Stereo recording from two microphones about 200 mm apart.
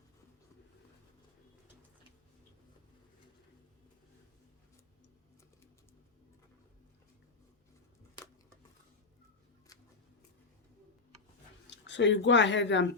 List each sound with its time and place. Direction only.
11.7 s speech: 65° left (ahead or behind)